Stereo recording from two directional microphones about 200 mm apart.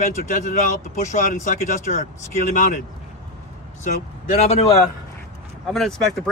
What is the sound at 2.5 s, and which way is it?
Speech, 40° left (ahead or behind).